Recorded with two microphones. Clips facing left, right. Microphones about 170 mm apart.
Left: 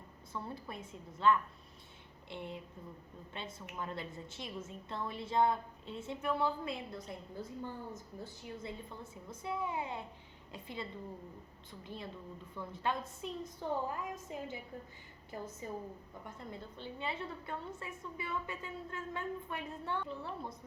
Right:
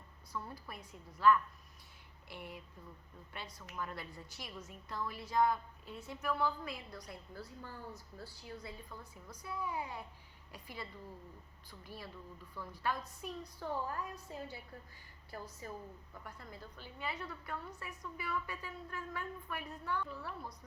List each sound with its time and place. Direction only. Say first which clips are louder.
0.3 s a woman's voice: left 3 dB; 25° left (ahead or behind)